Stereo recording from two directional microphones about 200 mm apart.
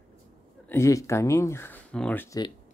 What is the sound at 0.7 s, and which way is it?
Speech, 15° left (ahead or behind).